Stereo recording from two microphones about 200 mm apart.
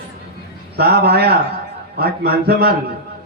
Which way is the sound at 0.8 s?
50° right (ahead or behind).